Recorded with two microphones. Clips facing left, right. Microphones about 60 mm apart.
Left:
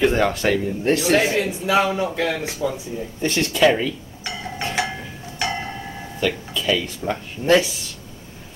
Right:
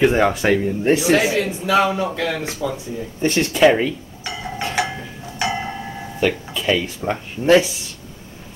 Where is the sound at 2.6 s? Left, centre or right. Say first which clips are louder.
Left 1 dB; centre.